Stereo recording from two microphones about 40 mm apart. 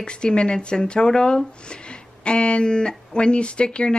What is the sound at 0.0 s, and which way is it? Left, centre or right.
Speech, left.